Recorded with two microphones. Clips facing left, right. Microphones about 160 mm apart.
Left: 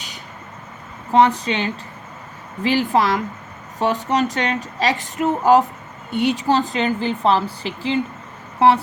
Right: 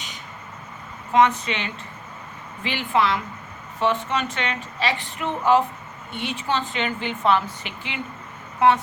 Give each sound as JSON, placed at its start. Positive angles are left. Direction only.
{"t": 1.1, "sound": "speech", "side_deg": 35}